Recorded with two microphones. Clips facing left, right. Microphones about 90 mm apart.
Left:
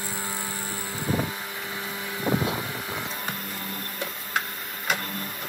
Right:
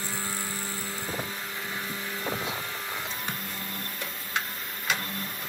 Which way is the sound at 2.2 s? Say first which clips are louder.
Left 8 dB; 15° left (ahead or behind).